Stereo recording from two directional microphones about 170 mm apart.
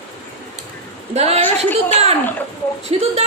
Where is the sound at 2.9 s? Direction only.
35° right (ahead or behind).